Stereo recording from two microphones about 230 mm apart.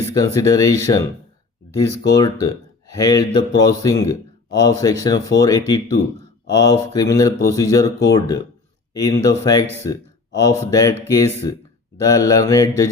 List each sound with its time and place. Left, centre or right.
0.2 s a man's voice: centre
2.0 s a man's voice: centre
11.9 s a man's voice: centre